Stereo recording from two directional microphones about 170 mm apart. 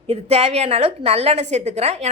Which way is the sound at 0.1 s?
35° right (ahead or behind).